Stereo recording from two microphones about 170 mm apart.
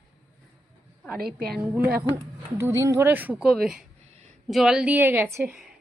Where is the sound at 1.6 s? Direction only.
10° right (ahead or behind).